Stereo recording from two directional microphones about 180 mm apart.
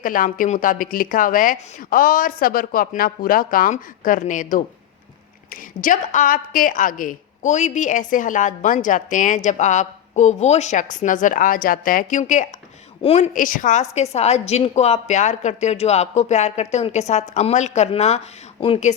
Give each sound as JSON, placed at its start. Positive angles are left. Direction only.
{"t": 0.0, "sound": "a woman's voice", "side_deg": 50}